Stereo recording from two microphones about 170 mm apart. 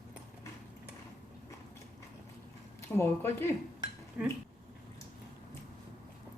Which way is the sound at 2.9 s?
15° left (ahead or behind).